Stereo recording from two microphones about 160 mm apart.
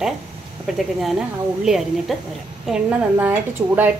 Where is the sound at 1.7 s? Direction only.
Centre (ahead or behind).